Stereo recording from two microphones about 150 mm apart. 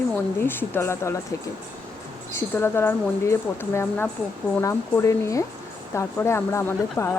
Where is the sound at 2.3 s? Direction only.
15° left (ahead or behind).